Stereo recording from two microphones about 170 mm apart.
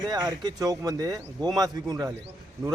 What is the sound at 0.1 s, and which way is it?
Speech, 25° right (ahead or behind).